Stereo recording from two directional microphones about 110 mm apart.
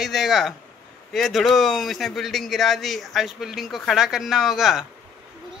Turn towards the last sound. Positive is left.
turn(degrees=-5)  # may be behind; listen again after turning